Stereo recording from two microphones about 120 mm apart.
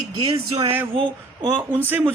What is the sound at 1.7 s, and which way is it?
Speech, 15° right (ahead or behind).